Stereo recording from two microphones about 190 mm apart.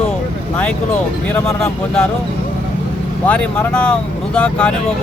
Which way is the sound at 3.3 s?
5° left (ahead or behind).